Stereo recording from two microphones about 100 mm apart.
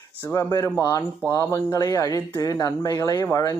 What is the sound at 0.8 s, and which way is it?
Speech, 40° left (ahead or behind).